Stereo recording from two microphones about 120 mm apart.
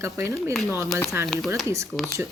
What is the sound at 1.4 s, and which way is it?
Speech, centre (ahead or behind).